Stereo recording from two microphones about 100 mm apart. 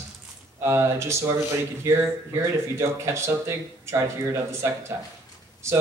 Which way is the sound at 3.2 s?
30° right (ahead or behind).